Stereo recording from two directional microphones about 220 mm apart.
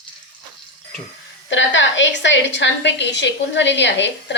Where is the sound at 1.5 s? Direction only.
55° left (ahead or behind).